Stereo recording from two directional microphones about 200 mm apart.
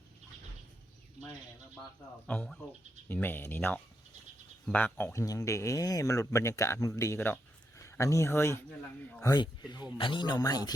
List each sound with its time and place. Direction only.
2.2 s speech: 5° left (ahead or behind)
9.3 s speech: 20° left (ahead or behind)